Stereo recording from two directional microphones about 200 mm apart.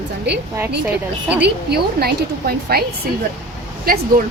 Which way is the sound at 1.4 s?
55° right (ahead or behind).